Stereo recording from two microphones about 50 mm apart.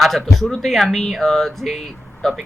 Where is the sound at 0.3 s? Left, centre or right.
Centre.